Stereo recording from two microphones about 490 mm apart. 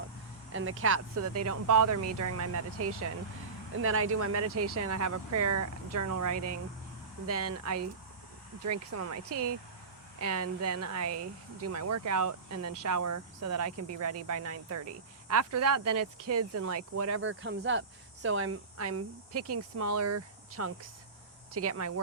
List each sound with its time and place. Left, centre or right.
0.5 s speech: right